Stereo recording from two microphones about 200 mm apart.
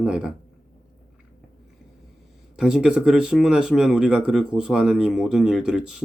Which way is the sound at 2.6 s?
5° right (ahead or behind).